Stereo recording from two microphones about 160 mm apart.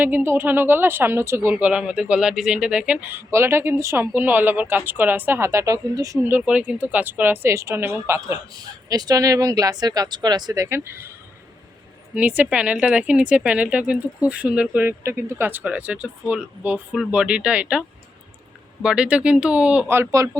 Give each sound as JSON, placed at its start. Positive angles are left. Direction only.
{"t": 0.0, "sound": "speech", "side_deg": -15}
{"t": 12.1, "sound": "speech", "side_deg": -10}